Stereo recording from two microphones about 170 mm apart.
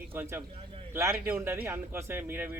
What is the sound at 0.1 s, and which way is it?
Speech, 10° right (ahead or behind).